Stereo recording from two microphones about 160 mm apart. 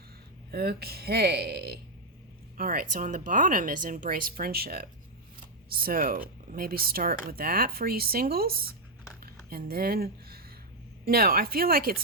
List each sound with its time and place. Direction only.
0.5 s speech: 75° right (ahead or behind)
2.6 s speech: 65° right (ahead or behind)
9.2 s a sound: 70° right (ahead or behind)
11.0 s speech: 70° right (ahead or behind)